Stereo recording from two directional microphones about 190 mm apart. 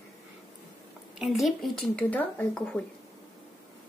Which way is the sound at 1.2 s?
Centre (ahead or behind).